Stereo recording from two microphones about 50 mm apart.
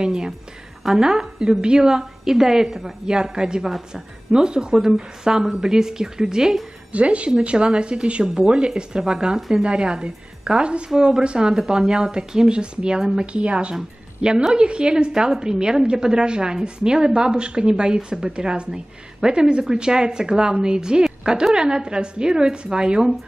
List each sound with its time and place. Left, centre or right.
0.0 s a woman's voice: centre
6.9 s a woman's voice: right
11.6 s a woman's voice: centre
11.9 s a woman's voice: centre